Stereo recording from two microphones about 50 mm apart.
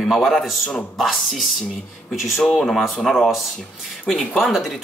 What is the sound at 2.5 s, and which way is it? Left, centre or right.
Speech, centre.